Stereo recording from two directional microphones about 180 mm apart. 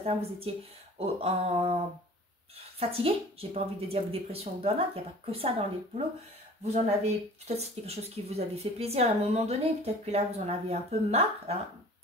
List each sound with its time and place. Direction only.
0.0 s speech: 35° right (ahead or behind)
2.8 s speech: 30° right (ahead or behind)